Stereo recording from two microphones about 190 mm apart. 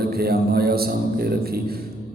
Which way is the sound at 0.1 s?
55° right (ahead or behind).